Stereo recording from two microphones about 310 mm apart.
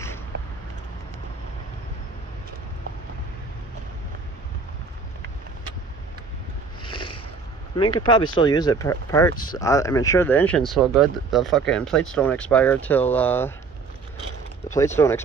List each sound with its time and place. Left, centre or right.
6.8 s a sound: centre
8.0 s speech: centre
14.7 s speech: centre